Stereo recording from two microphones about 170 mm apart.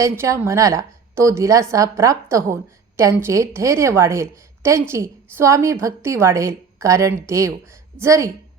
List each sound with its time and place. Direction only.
0.0 s a woman's voice: 15° right (ahead or behind)